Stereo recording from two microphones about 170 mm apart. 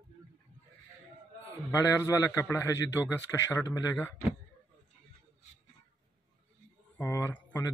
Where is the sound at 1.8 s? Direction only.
20° left (ahead or behind).